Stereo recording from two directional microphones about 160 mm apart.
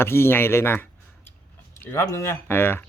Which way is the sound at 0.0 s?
15° left (ahead or behind).